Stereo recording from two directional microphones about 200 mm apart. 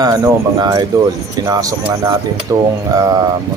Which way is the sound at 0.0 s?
20° right (ahead or behind).